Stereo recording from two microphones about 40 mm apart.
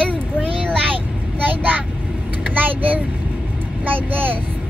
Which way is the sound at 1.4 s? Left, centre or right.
Right.